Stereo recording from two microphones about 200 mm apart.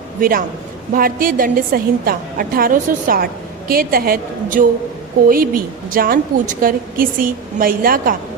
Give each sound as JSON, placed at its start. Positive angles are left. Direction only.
{"t": 0.2, "sound": "a woman's voice", "side_deg": -45}